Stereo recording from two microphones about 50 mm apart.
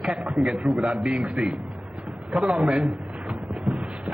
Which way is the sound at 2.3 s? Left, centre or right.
Centre.